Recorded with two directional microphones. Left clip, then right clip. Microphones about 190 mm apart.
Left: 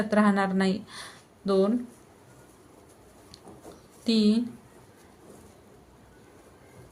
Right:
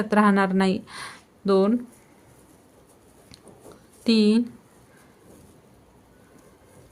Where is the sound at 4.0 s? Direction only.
35° right (ahead or behind).